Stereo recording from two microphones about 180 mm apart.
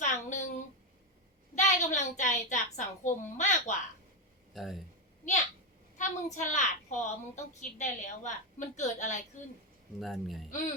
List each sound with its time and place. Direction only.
0.0 s a sound: 40° left (ahead or behind)
1.5 s a woman's voice: 40° left (ahead or behind)
4.5 s speech: centre (ahead or behind)
6.0 s a woman's voice: 40° left (ahead or behind)
10.0 s speech: centre (ahead or behind)